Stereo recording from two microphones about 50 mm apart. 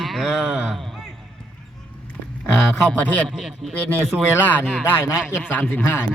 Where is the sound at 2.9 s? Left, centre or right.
Left.